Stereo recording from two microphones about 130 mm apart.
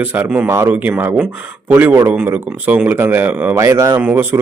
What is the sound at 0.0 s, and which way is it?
A man's voice, 15° right (ahead or behind).